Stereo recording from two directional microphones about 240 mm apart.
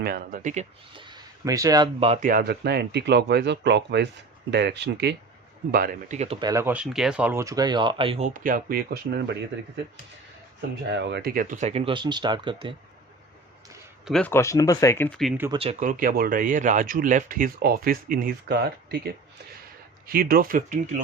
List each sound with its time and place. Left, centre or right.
0.0 s speech: right
10.9 s speech: right; by 12.7 s centre
14.0 s speech: centre
15.4 s speech: right
15.8 s speech: right